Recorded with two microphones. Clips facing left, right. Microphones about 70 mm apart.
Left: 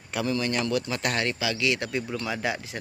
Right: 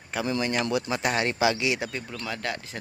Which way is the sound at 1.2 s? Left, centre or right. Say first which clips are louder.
Right 4 dB; right.